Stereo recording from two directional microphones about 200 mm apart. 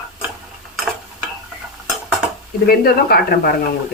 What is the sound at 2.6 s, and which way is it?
Speech, 50° left (ahead or behind).